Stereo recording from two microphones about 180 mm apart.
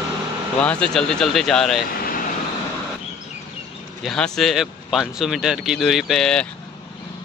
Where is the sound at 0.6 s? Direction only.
5° left (ahead or behind).